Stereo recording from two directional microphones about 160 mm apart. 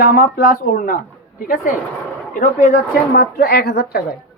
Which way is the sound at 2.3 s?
55° left (ahead or behind).